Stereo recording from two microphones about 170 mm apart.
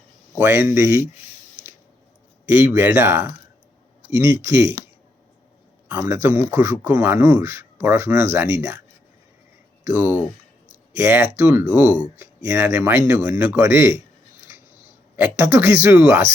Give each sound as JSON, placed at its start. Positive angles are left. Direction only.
{"t": 0.3, "sound": "speech", "side_deg": -10}
{"t": 2.5, "sound": "speech", "side_deg": -15}
{"t": 5.9, "sound": "speech", "side_deg": -10}
{"t": 9.8, "sound": "speech", "side_deg": -10}
{"t": 15.1, "sound": "speech", "side_deg": -10}